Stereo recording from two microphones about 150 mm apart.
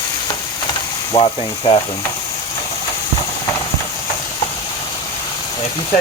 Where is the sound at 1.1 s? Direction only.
35° left (ahead or behind).